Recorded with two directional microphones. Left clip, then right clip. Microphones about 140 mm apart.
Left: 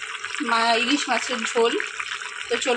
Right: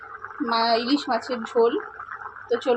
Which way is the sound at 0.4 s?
5° left (ahead or behind).